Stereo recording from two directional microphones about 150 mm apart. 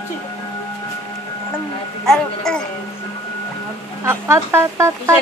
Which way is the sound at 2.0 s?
5° left (ahead or behind).